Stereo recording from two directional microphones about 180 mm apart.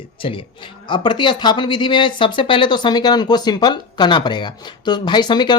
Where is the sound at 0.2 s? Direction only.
30° left (ahead or behind).